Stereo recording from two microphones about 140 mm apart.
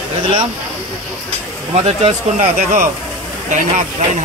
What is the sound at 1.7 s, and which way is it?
Speech, 55° right (ahead or behind).